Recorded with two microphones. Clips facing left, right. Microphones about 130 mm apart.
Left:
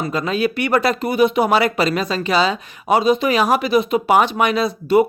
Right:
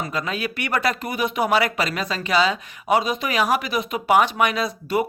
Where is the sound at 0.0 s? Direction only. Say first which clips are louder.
Left 7 dB; 30° left (ahead or behind).